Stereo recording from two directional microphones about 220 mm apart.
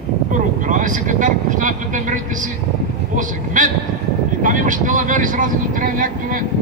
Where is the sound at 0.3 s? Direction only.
35° right (ahead or behind).